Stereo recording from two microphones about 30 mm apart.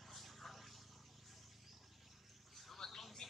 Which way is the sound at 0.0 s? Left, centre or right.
Centre.